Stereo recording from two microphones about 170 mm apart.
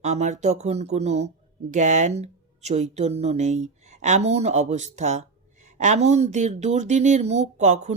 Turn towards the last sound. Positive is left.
turn(degrees=-40)  # may be behind; listen again after turning